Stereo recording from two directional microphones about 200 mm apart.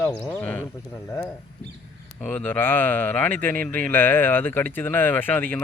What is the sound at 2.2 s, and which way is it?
Speech, 5° left (ahead or behind).